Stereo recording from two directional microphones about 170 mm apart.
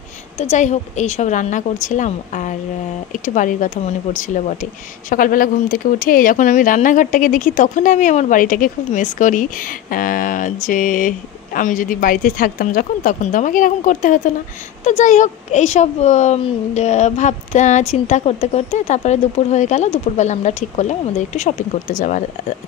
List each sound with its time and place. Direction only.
0.4 s speech: 45° left (ahead or behind)